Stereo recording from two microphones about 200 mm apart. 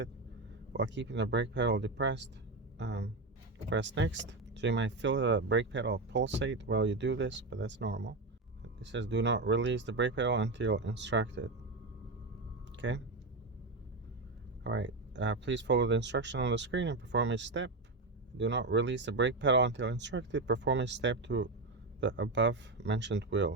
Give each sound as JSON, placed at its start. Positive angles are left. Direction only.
{"t": 0.7, "sound": "speech", "side_deg": -60}
{"t": 12.7, "sound": "a sound", "side_deg": -65}
{"t": 14.6, "sound": "speech", "side_deg": -65}